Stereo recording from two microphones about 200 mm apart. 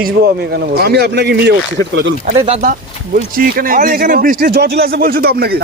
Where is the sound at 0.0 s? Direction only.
50° right (ahead or behind).